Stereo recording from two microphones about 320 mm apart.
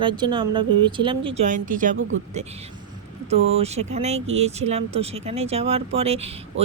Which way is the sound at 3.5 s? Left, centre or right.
Centre.